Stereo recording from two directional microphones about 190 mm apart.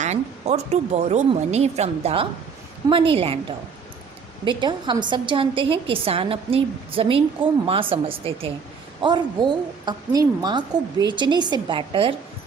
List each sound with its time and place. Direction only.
0.0 s a woman's voice: 35° right (ahead or behind)